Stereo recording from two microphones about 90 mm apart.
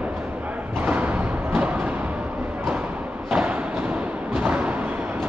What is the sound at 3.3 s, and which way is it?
Thump, 10° right (ahead or behind).